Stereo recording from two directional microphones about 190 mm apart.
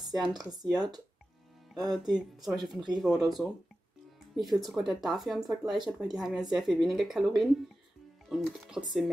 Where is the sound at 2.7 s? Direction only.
20° right (ahead or behind).